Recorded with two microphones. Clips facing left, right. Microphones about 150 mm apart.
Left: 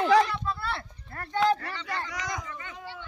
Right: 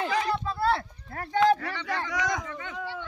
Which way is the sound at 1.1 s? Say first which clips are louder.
Right 3 dB; 75° right (ahead or behind).